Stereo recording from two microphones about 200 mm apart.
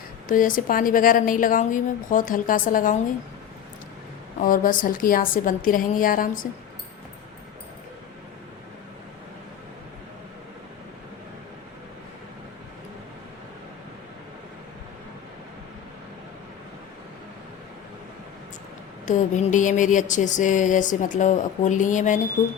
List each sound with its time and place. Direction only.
0.3 s a woman's voice: 40° left (ahead or behind)
4.4 s a woman's voice: 45° left (ahead or behind)
19.0 s a sound: 40° left (ahead or behind)